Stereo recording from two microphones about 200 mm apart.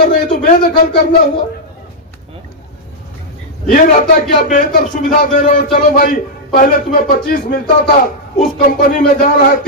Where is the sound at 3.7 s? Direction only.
45° left (ahead or behind).